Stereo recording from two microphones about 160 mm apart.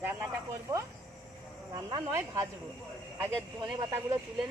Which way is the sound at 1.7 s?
25° right (ahead or behind).